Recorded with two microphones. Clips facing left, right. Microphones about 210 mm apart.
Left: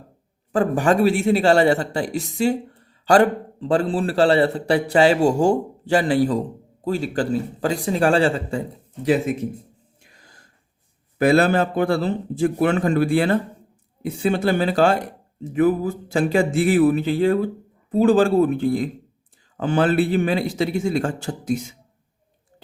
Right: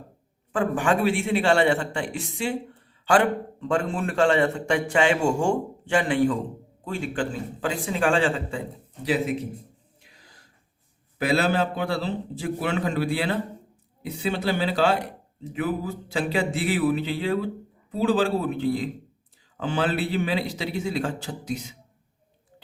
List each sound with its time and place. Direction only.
0.5 s a man's voice: 40° left (ahead or behind)
10.0 s a sound: 50° left (ahead or behind)
11.2 s a man's voice: 50° left (ahead or behind)